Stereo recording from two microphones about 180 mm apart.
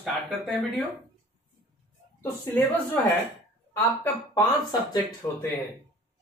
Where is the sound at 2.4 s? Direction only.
10° left (ahead or behind).